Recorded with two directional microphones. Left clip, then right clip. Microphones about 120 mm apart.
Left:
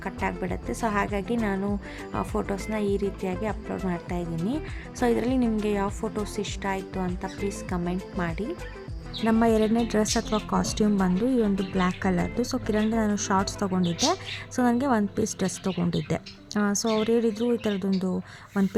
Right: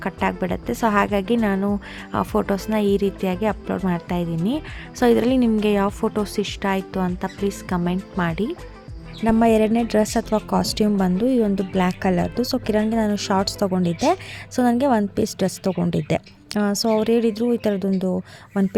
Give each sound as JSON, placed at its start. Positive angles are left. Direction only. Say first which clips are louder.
{"t": 0.0, "sound": "a woman's voice", "louder": "right 7 dB", "side_deg": -35}